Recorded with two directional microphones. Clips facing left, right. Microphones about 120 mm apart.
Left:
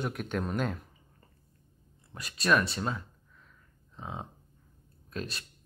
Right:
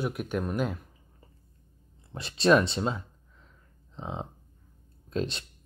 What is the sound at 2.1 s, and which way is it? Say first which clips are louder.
Speech: right 5 dB; 25° right (ahead or behind).